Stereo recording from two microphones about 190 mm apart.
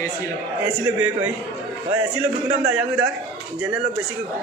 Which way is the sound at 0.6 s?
10° right (ahead or behind).